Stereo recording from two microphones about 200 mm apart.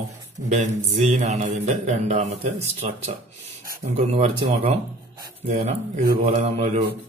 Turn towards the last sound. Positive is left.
turn(degrees=-30)  # may be behind; listen again after turning